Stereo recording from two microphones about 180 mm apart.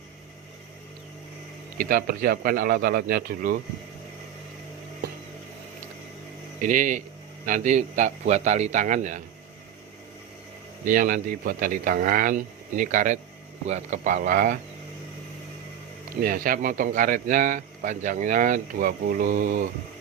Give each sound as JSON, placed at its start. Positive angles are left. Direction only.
{"t": 1.8, "sound": "speech", "side_deg": -55}
{"t": 6.6, "sound": "speech", "side_deg": -45}
{"t": 10.8, "sound": "speech", "side_deg": -50}
{"t": 16.2, "sound": "speech", "side_deg": -50}